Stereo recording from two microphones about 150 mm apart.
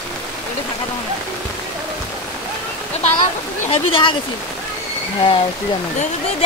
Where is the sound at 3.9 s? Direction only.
35° left (ahead or behind).